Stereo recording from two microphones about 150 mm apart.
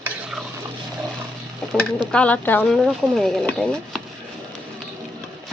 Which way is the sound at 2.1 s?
10° left (ahead or behind).